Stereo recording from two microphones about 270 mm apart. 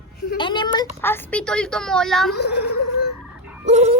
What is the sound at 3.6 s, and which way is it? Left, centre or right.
Fowl, right.